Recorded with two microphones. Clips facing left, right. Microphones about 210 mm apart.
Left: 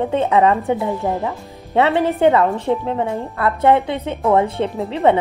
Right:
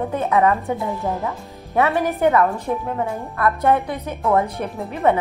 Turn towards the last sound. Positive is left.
turn(degrees=25)  # may be behind; listen again after turning